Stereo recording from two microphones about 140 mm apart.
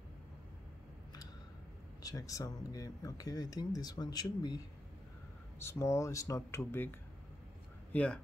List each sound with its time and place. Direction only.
2.0 s speech: 25° left (ahead or behind)
5.6 s speech: 20° left (ahead or behind)